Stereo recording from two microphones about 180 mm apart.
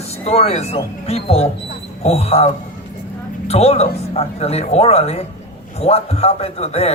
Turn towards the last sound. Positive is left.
turn(degrees=35)  # may be behind; listen again after turning